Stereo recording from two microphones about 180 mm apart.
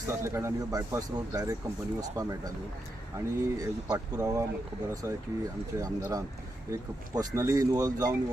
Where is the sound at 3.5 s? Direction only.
20° right (ahead or behind).